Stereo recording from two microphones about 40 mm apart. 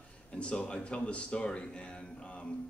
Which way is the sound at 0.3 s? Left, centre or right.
Left.